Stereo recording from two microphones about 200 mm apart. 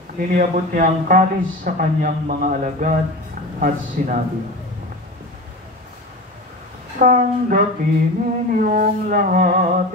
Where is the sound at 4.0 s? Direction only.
45° right (ahead or behind).